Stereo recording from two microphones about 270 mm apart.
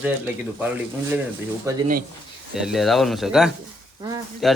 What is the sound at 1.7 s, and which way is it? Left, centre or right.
Speech, centre.